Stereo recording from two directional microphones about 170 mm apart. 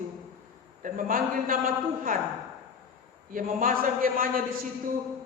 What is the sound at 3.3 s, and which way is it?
A woman's voice, 55° right (ahead or behind).